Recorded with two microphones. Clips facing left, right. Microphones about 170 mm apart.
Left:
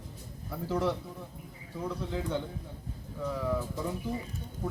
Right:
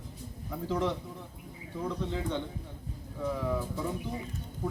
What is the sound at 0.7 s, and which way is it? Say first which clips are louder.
Speech: left 1 dB; 5° left (ahead or behind).